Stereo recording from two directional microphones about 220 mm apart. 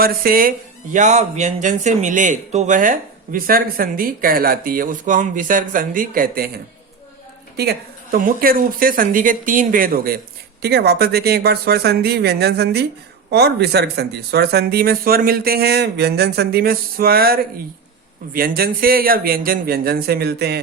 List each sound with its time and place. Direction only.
0.0 s a man's voice: 40° right (ahead or behind)
7.5 s a man's voice: 45° right (ahead or behind)